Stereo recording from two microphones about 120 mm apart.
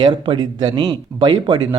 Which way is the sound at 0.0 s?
35° right (ahead or behind).